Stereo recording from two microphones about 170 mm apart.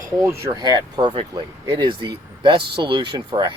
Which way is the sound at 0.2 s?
15° right (ahead or behind).